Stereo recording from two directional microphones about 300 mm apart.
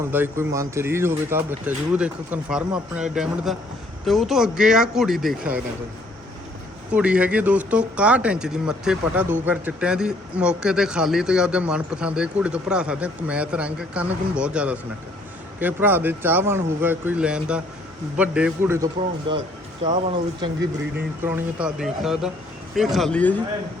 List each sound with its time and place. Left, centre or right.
0.1 s speech: centre
6.9 s speech: centre